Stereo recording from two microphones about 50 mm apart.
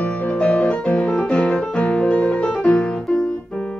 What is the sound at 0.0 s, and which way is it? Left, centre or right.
Piano, left.